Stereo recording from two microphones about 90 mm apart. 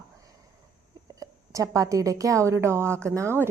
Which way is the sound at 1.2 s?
35° right (ahead or behind).